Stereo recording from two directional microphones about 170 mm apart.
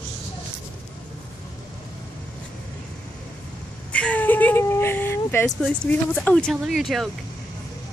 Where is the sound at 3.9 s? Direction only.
10° left (ahead or behind).